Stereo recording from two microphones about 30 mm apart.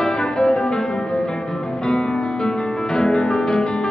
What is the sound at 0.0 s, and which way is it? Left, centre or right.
Music, left.